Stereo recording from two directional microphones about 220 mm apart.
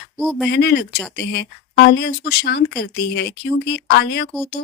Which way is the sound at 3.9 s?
50° left (ahead or behind).